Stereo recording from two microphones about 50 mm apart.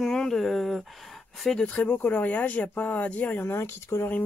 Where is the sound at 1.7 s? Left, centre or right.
Left.